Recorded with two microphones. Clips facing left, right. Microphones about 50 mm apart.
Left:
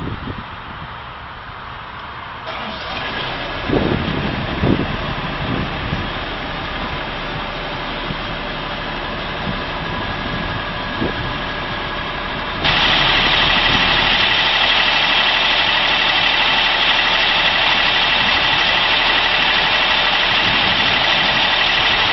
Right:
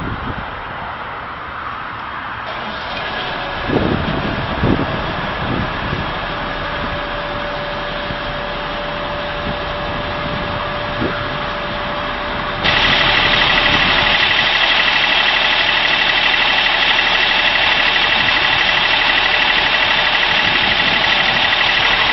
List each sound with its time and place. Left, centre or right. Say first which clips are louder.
12.6 s vehicle: right 1 dB; centre
14.5 s engine: right 1 dB; centre
20.9 s vehicle: right 1 dB; centre